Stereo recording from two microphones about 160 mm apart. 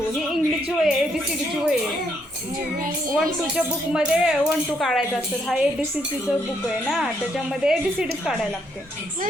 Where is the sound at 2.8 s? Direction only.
60° right (ahead or behind).